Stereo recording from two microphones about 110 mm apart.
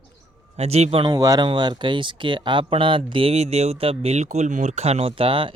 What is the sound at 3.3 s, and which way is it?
Speech, 75° right (ahead or behind).